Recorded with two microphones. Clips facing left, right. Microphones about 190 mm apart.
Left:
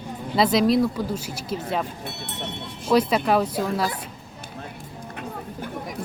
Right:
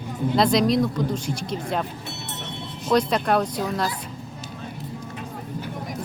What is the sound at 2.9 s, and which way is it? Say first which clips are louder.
Speech: left 1 dB; 5° left (ahead or behind).